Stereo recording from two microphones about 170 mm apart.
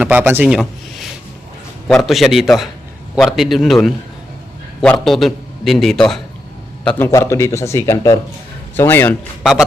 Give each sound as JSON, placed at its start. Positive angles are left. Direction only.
{"t": 0.0, "sound": "a man's voice", "side_deg": -10}
{"t": 6.8, "sound": "a man's voice", "side_deg": 15}
{"t": 9.4, "sound": "a man's voice", "side_deg": 0}